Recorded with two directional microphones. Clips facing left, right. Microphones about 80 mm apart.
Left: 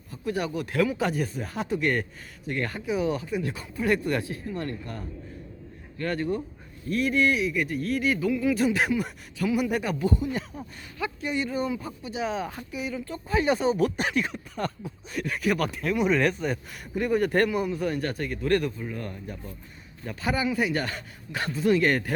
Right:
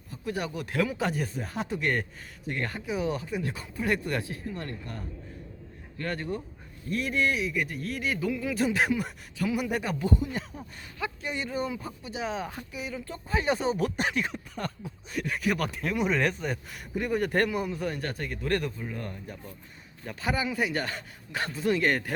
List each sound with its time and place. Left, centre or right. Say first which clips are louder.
0.3 s speech: left 4 dB; right
3.8 s speech: left 4 dB; centre
6.0 s speech: left 5 dB; right